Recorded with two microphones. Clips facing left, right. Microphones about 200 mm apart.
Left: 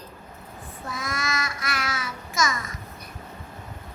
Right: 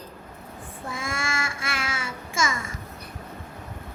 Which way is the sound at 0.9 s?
30° right (ahead or behind).